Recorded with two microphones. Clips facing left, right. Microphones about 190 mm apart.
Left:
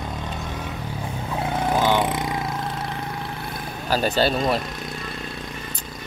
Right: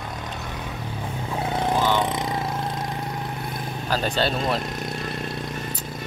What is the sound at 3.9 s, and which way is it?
Speech, 5° left (ahead or behind).